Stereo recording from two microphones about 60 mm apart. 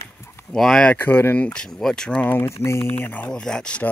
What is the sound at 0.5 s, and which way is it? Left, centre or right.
Speech, centre.